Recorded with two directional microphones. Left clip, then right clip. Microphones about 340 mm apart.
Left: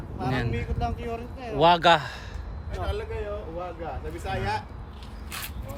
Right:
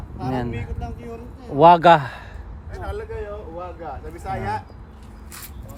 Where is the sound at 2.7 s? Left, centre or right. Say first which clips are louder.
Right 1 dB; centre.